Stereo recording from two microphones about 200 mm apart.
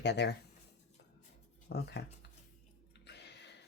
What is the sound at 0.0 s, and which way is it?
Speech, 60° left (ahead or behind).